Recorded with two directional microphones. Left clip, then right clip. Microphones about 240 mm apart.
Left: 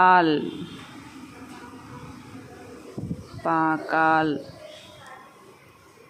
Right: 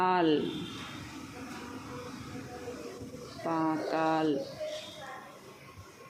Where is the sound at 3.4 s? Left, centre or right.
Left.